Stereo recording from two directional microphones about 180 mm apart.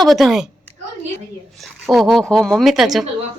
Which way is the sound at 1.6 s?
Centre (ahead or behind).